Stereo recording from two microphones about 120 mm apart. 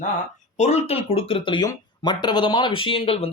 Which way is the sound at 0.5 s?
70° left (ahead or behind).